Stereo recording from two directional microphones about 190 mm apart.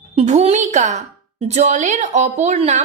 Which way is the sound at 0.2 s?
35° right (ahead or behind).